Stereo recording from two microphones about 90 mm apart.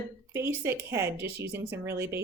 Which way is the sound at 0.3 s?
25° right (ahead or behind).